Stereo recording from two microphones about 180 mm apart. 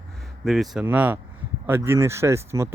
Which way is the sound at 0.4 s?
Centre (ahead or behind).